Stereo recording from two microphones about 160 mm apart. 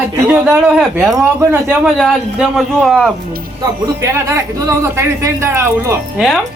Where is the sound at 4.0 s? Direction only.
20° right (ahead or behind).